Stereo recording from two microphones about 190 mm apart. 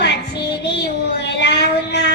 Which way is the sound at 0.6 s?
65° left (ahead or behind).